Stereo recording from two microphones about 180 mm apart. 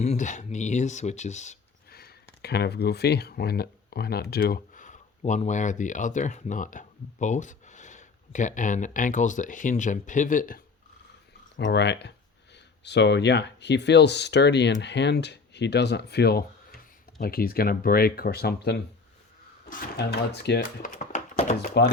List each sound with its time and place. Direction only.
0.0 s speech: 40° left (ahead or behind)
1.9 s speech: 60° left (ahead or behind)
11.5 s speech: 80° left; by 21.7 s 40° left (ahead or behind)